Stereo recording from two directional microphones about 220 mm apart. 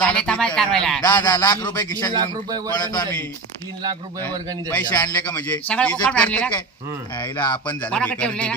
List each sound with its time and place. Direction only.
0.0 s a man's voice: 5° left (ahead or behind)
1.0 s a man's voice: 20° left (ahead or behind)
2.1 s a man's voice: 20° right (ahead or behind)
4.7 s a man's voice: 10° left (ahead or behind)
7.2 s speech: 20° left (ahead or behind)
7.7 s a man's voice: 5° left (ahead or behind)